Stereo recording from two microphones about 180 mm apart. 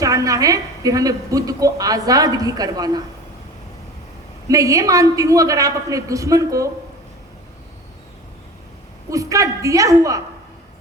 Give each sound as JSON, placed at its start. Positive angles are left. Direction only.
{"t": 0.0, "sound": "a woman's voice", "side_deg": -20}
{"t": 4.4, "sound": "a woman's voice", "side_deg": -20}
{"t": 9.0, "sound": "a woman's voice", "side_deg": -20}